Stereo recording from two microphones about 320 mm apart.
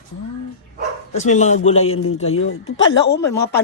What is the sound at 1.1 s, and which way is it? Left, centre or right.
Speech, left.